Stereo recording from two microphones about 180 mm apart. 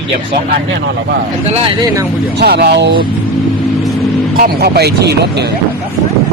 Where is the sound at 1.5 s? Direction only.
35° right (ahead or behind).